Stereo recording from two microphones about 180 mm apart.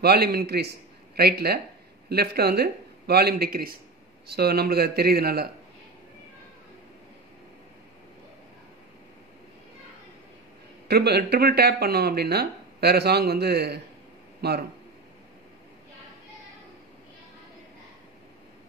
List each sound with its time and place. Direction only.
0.0 s a man's voice: 60° right (ahead or behind)
10.9 s speech: 65° right (ahead or behind)